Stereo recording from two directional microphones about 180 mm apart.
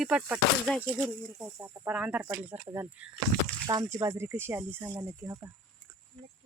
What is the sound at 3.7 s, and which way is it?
Speech, 20° right (ahead or behind).